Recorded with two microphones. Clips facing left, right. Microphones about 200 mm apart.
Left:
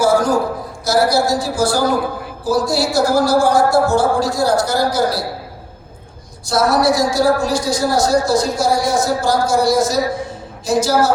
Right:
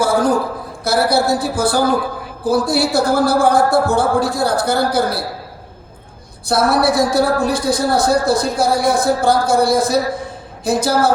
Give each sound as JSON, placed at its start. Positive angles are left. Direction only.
{"t": 0.0, "sound": "a man's voice", "side_deg": -55}
{"t": 6.5, "sound": "a man's voice", "side_deg": -60}